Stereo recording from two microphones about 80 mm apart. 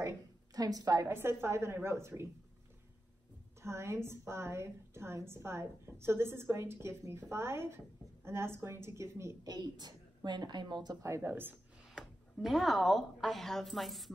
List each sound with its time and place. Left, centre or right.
0.6 s a woman's voice: right
1.0 s a woman's voice: right
3.6 s a woman's voice: right
9.4 s a woman's voice: right
11.0 s a woman's voice: right
12.0 s speech: centre